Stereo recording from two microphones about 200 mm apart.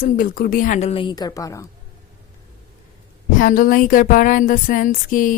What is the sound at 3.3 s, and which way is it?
Speech, 45° left (ahead or behind).